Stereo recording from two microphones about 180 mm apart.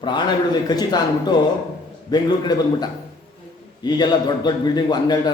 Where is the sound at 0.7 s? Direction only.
20° left (ahead or behind).